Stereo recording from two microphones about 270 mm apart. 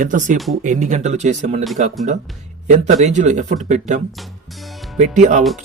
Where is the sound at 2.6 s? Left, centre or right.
Right.